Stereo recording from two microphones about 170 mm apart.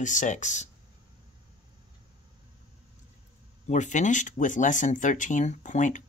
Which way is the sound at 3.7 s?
45° left (ahead or behind).